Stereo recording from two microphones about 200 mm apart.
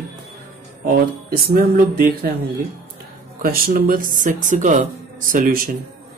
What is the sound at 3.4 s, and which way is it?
Speech, 45° right (ahead or behind).